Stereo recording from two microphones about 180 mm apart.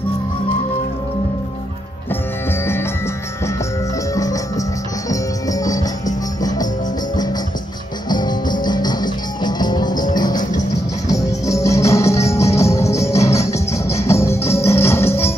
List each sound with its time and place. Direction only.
2.6 s music: 15° left (ahead or behind)
4.1 s music: 20° left (ahead or behind)
8.1 s music: 25° left (ahead or behind)